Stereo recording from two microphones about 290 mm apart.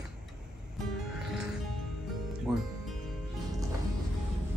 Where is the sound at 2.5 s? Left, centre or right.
Centre.